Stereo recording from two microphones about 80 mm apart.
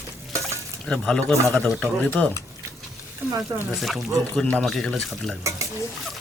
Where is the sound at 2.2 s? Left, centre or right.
Centre.